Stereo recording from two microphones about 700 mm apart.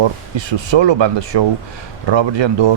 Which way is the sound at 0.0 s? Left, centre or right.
Right.